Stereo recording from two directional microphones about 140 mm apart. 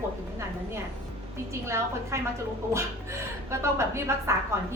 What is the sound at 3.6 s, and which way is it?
Speech, 20° right (ahead or behind).